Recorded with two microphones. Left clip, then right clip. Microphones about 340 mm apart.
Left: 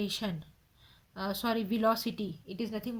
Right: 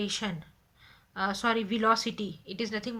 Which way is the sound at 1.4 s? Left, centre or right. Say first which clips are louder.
Right 2 dB; centre.